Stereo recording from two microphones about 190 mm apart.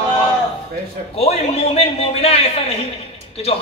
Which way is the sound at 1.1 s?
30° left (ahead or behind).